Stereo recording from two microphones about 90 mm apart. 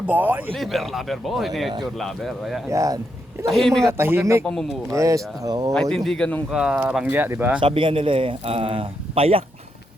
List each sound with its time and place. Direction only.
0.1 s speech: 20° right (ahead or behind)
0.5 s a man's voice: centre (ahead or behind)
2.6 s speech: 35° right (ahead or behind)
3.5 s a man's voice: 5° left (ahead or behind)
3.8 s speech: 25° right (ahead or behind); by 5.7 s 45° right (ahead or behind)
5.7 s speech: 5° left (ahead or behind)
6.5 s speech: 5° right (ahead or behind)
7.0 s speech: 20° right (ahead or behind)
7.6 s a man's voice: 75° right (ahead or behind); by 9.4 s 90° right